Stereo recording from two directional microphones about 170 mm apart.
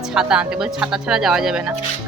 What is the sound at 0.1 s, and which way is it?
Speech, 5° right (ahead or behind).